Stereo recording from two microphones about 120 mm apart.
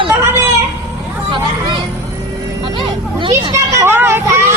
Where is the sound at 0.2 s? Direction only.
25° right (ahead or behind).